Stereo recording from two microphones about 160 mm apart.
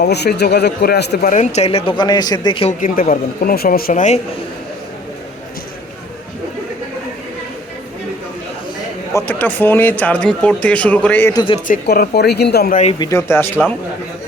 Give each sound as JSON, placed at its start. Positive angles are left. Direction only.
{"t": 0.0, "sound": "speech", "side_deg": 90}
{"t": 1.3, "sound": "speech", "side_deg": 45}
{"t": 2.6, "sound": "speech", "side_deg": 60}
{"t": 9.1, "sound": "speech", "side_deg": 10}
{"t": 11.3, "sound": "speech", "side_deg": 35}
{"t": 11.7, "sound": "speech", "side_deg": 80}
{"t": 13.1, "sound": "speech", "side_deg": 15}